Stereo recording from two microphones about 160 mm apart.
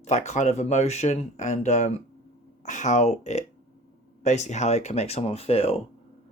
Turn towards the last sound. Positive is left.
turn(degrees=35)  # may be behind; listen again after turning